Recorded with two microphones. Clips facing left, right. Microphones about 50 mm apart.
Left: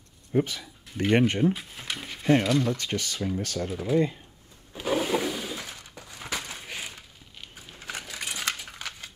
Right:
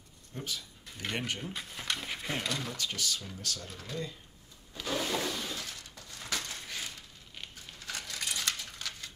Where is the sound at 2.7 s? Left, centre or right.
Left.